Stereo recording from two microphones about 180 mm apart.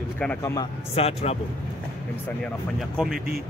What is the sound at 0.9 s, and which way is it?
Speech, 35° left (ahead or behind).